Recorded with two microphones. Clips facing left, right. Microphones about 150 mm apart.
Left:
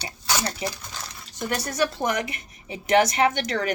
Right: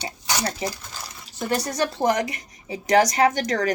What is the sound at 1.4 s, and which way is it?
A woman's voice, 35° right (ahead or behind).